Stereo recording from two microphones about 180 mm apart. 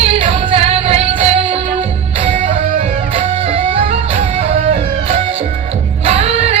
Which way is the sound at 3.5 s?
30° right (ahead or behind).